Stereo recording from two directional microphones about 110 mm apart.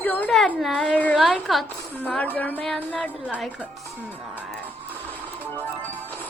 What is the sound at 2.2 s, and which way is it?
A woman's voice, 15° left (ahead or behind).